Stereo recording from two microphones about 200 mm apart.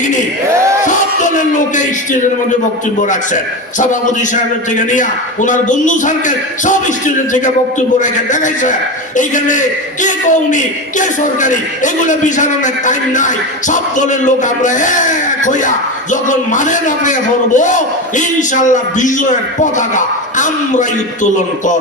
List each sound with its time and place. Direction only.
0.5 s music: 15° right (ahead or behind)
0.9 s music: 40° left (ahead or behind)
5.5 s a man's voice: 40° left (ahead or behind)
7.9 s a man's voice: 40° left (ahead or behind)